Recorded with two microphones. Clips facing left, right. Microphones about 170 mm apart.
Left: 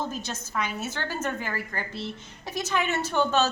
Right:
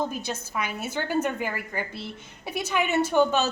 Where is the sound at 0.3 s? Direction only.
10° right (ahead or behind).